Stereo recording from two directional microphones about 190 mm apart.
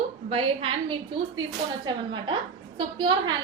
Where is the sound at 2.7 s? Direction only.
25° right (ahead or behind).